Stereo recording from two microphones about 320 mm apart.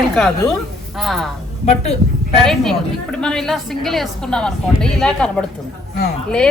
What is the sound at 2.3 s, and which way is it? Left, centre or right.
A woman's voice, centre.